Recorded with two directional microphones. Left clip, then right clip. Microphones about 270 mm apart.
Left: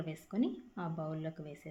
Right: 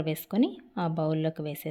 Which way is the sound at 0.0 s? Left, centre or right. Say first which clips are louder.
Right 9 dB; right.